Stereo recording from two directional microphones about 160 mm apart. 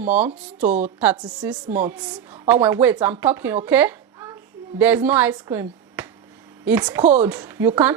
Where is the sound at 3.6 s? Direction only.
10° right (ahead or behind).